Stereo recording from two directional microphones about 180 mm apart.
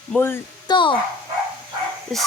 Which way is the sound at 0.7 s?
25° left (ahead or behind).